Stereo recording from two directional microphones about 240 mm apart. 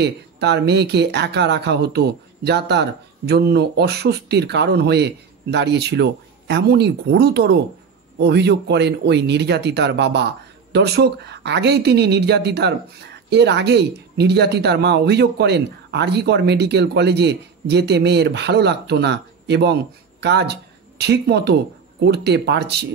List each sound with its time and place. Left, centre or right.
0.0 s speech: right